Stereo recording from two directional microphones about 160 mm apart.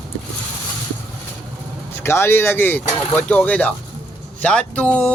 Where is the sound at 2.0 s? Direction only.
15° left (ahead or behind).